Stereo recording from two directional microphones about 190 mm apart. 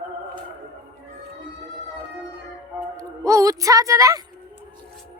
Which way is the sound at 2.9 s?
15° right (ahead or behind).